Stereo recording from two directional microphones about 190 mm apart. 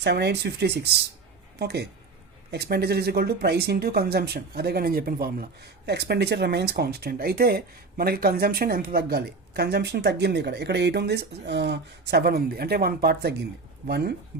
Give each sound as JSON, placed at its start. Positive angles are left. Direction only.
{"t": 0.0, "sound": "speech", "side_deg": -60}